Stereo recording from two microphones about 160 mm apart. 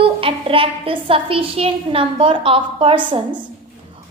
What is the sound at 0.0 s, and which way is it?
A woman's voice, 35° right (ahead or behind).